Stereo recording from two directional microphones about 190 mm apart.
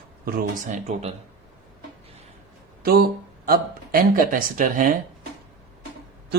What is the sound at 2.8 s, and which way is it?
Speech, 55° right (ahead or behind).